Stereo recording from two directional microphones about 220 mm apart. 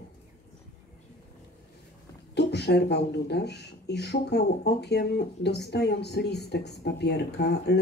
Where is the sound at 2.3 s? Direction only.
50° left (ahead or behind).